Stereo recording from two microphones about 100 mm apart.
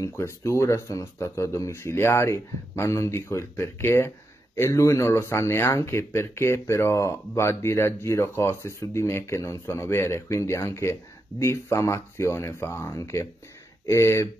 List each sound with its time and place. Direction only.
0.0 s speech: 30° left (ahead or behind)